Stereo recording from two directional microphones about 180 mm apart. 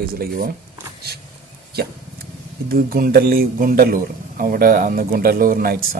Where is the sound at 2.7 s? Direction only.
55° right (ahead or behind).